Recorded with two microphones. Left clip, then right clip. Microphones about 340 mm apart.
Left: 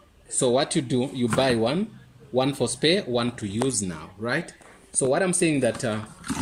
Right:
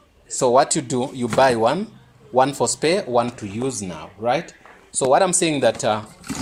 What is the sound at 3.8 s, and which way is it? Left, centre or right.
Speech, centre.